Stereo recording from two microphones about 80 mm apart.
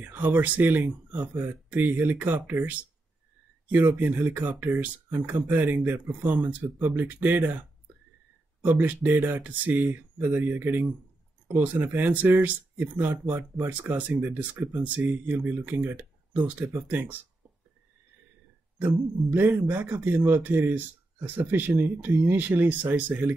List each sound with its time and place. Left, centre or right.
0.0 s speech: right
8.6 s speech: right
19.3 s speech: right